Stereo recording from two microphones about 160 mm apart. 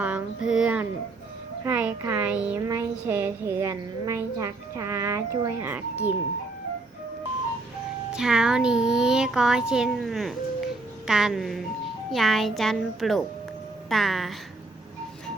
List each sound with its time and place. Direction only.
0.0 s a woman's voice: 5° right (ahead or behind)
2.6 s a woman's voice: 20° right (ahead or behind)
8.1 s a child's voice: 5° right (ahead or behind)